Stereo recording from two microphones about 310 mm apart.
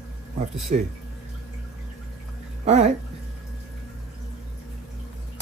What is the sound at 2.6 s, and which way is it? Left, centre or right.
Speech, right.